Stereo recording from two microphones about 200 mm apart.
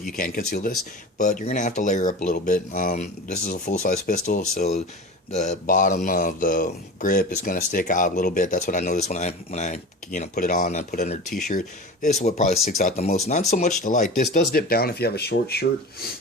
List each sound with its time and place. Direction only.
0.1 s speech: 45° left (ahead or behind)